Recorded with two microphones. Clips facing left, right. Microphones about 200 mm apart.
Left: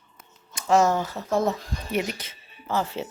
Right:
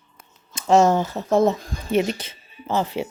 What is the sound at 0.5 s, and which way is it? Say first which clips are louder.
Speech: right 4 dB; 25° right (ahead or behind).